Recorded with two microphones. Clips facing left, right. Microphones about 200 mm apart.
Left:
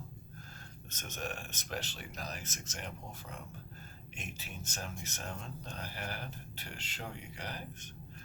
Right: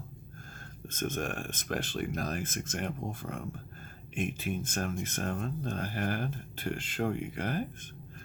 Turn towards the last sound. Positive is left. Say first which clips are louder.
# right 11 dB
turn(degrees=-50)  # may be behind; listen again after turning